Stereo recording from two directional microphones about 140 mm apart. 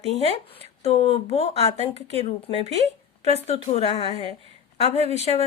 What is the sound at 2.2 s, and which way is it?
Speech, 50° left (ahead or behind).